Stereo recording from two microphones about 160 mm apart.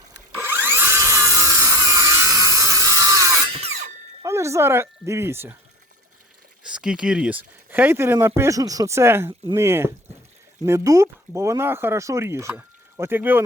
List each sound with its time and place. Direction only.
0.3 s a sound: 15° right (ahead or behind)
3.5 s tools: 40° right (ahead or behind)
4.2 s speech: 20° right (ahead or behind)
6.7 s speech: 5° right (ahead or behind)